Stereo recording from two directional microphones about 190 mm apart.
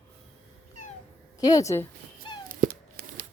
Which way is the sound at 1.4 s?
20° left (ahead or behind).